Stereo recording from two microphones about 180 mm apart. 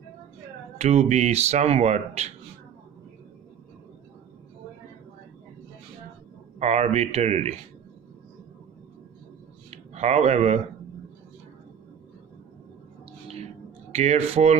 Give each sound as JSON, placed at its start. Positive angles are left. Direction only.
{"t": 0.8, "sound": "speech", "side_deg": -35}
{"t": 6.6, "sound": "speech", "side_deg": -40}
{"t": 9.6, "sound": "a sound", "side_deg": -40}
{"t": 13.9, "sound": "speech", "side_deg": -35}